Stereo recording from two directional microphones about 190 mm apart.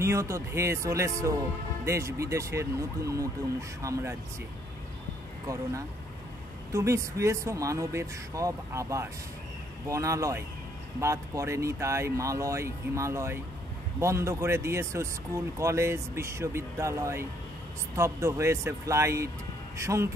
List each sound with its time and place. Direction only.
0.0 s speech: 15° right (ahead or behind)
6.7 s speech: 15° right (ahead or behind)